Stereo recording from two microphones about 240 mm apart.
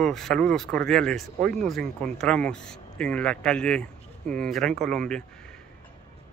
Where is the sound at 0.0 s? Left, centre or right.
Centre.